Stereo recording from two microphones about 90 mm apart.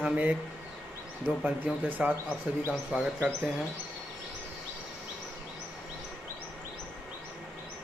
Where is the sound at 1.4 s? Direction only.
20° right (ahead or behind).